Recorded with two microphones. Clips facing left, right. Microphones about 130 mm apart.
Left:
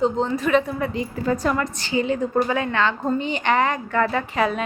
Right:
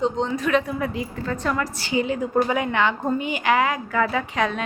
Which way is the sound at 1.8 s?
10° right (ahead or behind).